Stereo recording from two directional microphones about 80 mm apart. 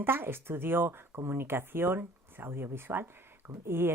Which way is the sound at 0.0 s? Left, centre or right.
Right.